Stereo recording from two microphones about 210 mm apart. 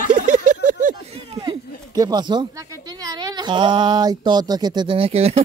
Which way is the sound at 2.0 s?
20° right (ahead or behind).